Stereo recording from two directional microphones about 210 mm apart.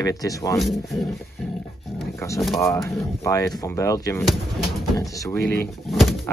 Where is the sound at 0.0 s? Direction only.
15° left (ahead or behind).